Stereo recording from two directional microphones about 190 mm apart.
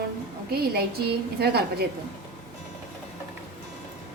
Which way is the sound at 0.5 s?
55° right (ahead or behind).